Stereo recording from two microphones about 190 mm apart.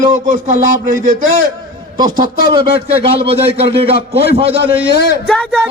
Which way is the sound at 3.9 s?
55° left (ahead or behind).